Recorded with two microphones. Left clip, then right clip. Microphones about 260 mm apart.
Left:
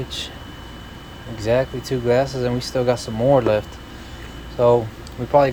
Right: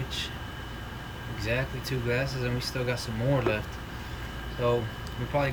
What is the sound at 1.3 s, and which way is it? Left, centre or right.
Speech, centre.